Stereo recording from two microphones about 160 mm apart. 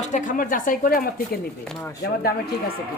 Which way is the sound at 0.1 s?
55° left (ahead or behind).